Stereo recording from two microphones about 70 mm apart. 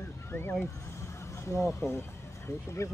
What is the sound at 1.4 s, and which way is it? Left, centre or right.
Speech, left.